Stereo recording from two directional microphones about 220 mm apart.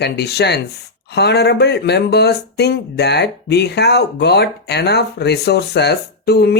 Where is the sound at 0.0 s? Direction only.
50° left (ahead or behind).